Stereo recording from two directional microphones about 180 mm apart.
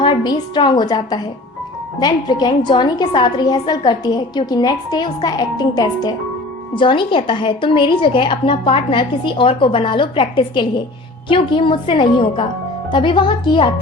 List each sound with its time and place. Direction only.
0.0 s a woman's voice: 25° left (ahead or behind)